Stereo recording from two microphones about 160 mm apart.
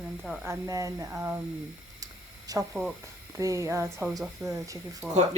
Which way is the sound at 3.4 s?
20° right (ahead or behind).